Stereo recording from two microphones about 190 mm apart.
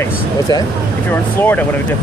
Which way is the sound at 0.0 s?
20° left (ahead or behind).